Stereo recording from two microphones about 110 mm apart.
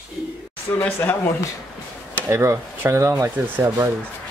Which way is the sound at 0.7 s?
20° left (ahead or behind).